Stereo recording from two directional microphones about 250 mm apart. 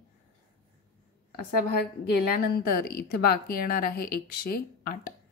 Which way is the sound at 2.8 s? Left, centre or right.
Left.